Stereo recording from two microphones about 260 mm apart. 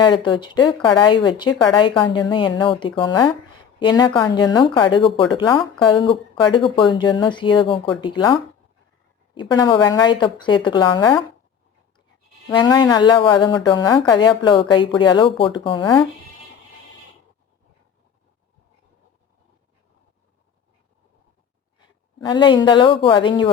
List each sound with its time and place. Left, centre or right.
0.0 s a woman's voice: centre
12.5 s a woman's voice: centre
22.2 s a woman's voice: centre